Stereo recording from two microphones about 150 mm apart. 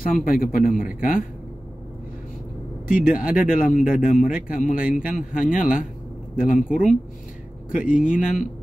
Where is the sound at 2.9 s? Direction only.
65° left (ahead or behind).